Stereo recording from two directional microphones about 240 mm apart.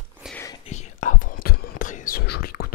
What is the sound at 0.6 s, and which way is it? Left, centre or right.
Whispering, left.